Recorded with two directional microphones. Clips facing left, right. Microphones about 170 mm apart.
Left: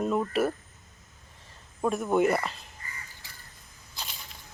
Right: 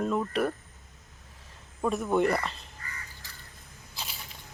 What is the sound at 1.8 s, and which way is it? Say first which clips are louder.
Speech: left 1 dB; 5° left (ahead or behind).